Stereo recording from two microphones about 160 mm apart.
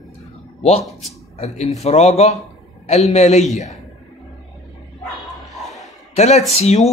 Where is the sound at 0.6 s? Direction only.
40° left (ahead or behind).